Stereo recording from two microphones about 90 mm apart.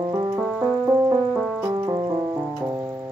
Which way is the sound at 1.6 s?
35° right (ahead or behind).